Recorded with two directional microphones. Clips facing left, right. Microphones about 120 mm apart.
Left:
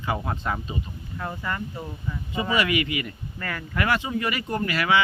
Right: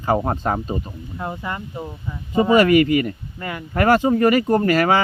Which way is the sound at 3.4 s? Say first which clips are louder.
Right 2 dB; 20° right (ahead or behind).